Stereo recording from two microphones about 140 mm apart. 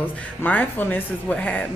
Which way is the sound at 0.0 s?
10° left (ahead or behind).